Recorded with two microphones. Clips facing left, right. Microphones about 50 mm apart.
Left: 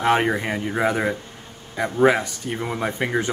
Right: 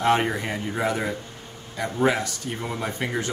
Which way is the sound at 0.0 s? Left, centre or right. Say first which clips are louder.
Left 2 dB; centre.